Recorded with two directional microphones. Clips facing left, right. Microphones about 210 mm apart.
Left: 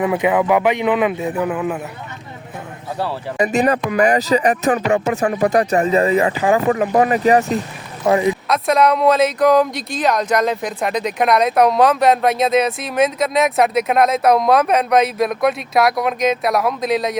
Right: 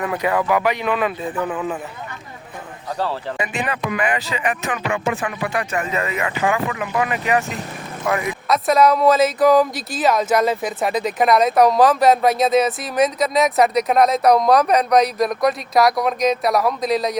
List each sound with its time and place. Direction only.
0.0 s speech: 15° left (ahead or behind)
3.3 s speech: 40° left (ahead or behind)
8.0 s speech: 25° left (ahead or behind)
8.4 s speech: centre (ahead or behind)